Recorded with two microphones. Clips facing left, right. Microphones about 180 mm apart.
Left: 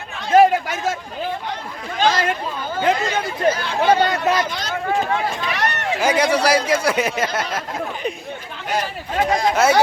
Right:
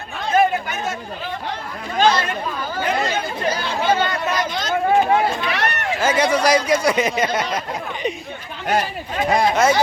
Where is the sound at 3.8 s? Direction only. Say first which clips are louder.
Left 4 dB; 90° left.